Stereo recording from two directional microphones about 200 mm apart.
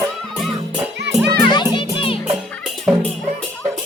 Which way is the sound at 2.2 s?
5° right (ahead or behind).